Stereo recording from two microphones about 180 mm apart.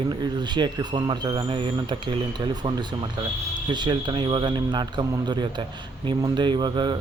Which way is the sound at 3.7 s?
25° right (ahead or behind).